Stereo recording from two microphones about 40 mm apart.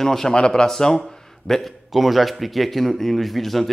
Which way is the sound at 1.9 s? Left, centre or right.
Centre.